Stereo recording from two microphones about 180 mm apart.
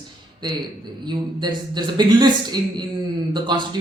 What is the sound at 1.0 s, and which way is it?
A man's voice, 25° right (ahead or behind).